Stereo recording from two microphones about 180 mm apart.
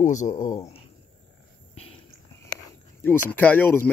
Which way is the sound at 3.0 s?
10° left (ahead or behind).